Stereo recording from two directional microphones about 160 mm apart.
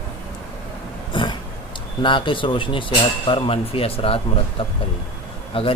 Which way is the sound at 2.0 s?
30° left (ahead or behind).